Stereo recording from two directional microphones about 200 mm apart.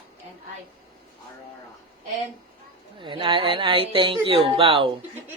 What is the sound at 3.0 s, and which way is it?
Speech, 25° right (ahead or behind).